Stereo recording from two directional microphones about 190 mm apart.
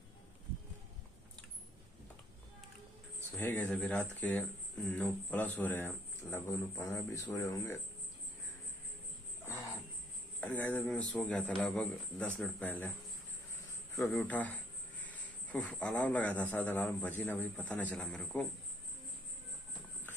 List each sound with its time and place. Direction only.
3.3 s a man's voice: 10° left (ahead or behind)
9.5 s music: 15° left (ahead or behind)
10.4 s a man's voice: 10° left (ahead or behind)
14.1 s speech: 10° left (ahead or behind)